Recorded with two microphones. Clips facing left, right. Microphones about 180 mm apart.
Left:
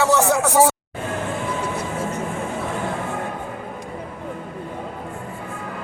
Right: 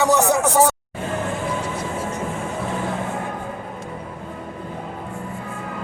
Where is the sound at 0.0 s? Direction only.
15° right (ahead or behind).